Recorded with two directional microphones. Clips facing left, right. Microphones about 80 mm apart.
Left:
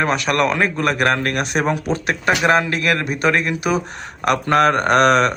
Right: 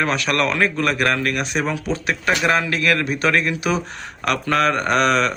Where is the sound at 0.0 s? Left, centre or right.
Centre.